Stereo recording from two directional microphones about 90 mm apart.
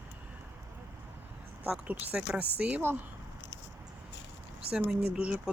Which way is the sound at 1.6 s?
15° right (ahead or behind).